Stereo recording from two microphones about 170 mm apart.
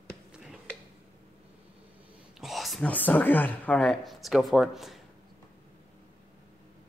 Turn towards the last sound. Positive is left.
turn(degrees=0)  # may be behind; listen again after turning